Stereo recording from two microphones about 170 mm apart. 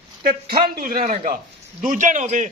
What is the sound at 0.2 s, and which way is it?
A man's voice, 60° right (ahead or behind).